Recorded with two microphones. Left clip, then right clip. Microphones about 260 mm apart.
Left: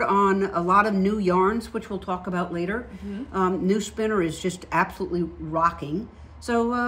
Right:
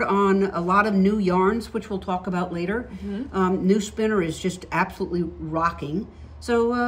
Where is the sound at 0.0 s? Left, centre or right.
Centre.